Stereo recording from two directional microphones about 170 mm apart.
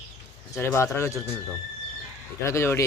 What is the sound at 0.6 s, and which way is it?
Speech, 15° left (ahead or behind).